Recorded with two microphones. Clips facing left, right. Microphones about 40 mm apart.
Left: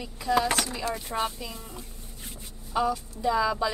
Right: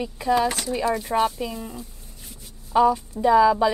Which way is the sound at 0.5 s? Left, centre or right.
Left.